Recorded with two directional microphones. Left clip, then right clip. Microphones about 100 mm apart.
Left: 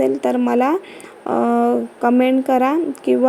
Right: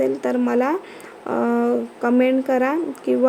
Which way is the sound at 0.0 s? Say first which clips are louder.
Left 3 dB; 40° left (ahead or behind).